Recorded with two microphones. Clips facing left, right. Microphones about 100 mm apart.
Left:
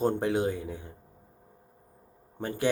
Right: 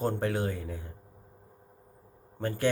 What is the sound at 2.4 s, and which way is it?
Speech, 15° left (ahead or behind).